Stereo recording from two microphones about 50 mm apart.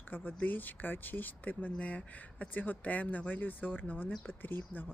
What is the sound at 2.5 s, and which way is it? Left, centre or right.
Speech, left.